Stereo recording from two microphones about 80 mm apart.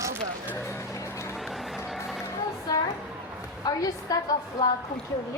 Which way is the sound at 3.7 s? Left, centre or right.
Left.